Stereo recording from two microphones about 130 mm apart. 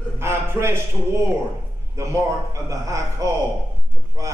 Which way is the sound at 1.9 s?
25° right (ahead or behind).